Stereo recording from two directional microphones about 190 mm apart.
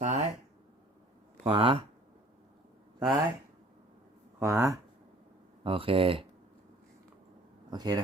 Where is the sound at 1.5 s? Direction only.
30° right (ahead or behind).